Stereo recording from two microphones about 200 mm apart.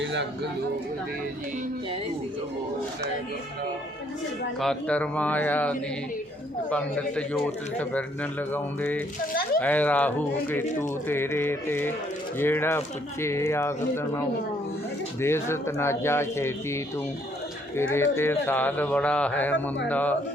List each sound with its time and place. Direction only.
0.0 s a sound: 65° right (ahead or behind)
4.6 s speech: 5° left (ahead or behind)
15.2 s speech: 15° left (ahead or behind)